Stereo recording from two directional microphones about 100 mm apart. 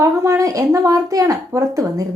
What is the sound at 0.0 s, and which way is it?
Speech, 30° right (ahead or behind).